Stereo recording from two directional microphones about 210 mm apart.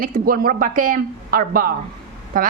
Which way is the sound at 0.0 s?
40° right (ahead or behind).